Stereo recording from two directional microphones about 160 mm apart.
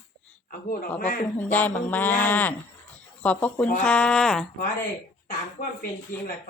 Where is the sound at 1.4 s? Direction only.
10° left (ahead or behind).